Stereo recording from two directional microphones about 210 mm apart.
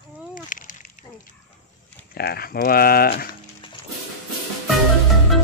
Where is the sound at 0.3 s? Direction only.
40° left (ahead or behind).